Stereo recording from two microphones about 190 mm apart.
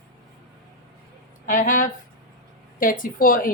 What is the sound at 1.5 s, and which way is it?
A woman's voice, 45° left (ahead or behind).